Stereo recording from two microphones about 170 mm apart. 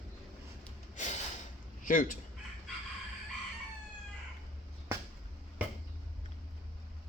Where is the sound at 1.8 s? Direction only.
50° left (ahead or behind).